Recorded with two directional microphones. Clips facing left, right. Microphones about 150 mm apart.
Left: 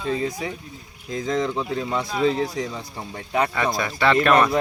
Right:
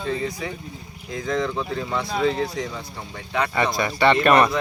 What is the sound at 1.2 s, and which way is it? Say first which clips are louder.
Speech: left 1 dB; 25° left (ahead or behind).